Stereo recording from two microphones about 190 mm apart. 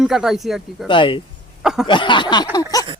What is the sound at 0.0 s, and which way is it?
Speech, centre (ahead or behind).